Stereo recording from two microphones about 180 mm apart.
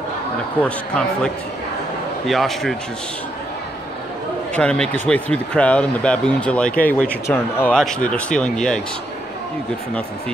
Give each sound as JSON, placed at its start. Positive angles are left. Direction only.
{"t": 0.6, "sound": "speech", "side_deg": 5}
{"t": 4.6, "sound": "speech", "side_deg": 5}